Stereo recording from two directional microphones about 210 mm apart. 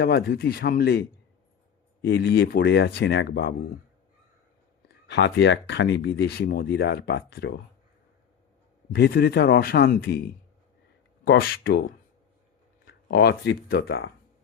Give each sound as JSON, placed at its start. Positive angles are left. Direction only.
{"t": 0.0, "sound": "speech", "side_deg": 50}
{"t": 5.0, "sound": "speech", "side_deg": 55}
{"t": 8.9, "sound": "speech", "side_deg": 45}